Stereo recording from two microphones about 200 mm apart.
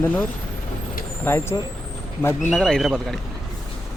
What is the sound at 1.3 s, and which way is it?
Speech, 10° left (ahead or behind).